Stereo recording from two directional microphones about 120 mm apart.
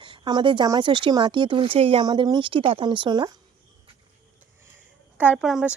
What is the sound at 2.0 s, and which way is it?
Speech, 35° right (ahead or behind).